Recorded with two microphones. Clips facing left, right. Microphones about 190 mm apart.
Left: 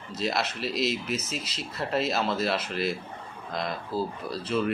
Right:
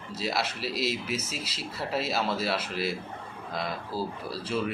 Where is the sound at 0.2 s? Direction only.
5° right (ahead or behind).